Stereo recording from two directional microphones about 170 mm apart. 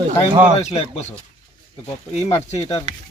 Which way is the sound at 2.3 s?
40° left (ahead or behind).